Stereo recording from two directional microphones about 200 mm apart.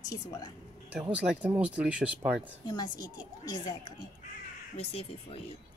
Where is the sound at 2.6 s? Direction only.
20° left (ahead or behind).